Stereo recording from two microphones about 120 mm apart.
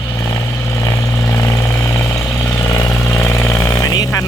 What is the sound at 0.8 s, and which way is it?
Vehicle, 25° left (ahead or behind).